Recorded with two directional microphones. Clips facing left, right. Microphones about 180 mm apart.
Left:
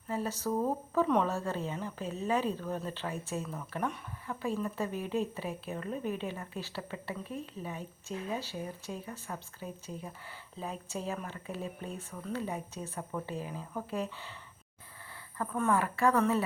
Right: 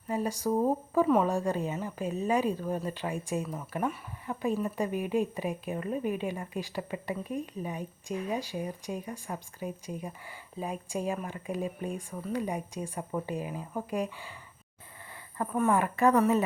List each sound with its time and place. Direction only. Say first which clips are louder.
0.1 s a woman's voice: right 4 dB; 15° right (ahead or behind)
15.4 s a woman's voice: right 3 dB; 15° right (ahead or behind)